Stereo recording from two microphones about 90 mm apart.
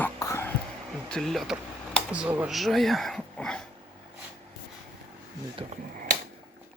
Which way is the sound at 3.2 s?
10° left (ahead or behind).